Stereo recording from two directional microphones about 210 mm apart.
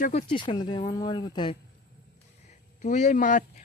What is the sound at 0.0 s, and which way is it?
Speech, 30° left (ahead or behind).